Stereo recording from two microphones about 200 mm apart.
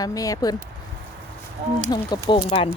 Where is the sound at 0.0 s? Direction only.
20° left (ahead or behind).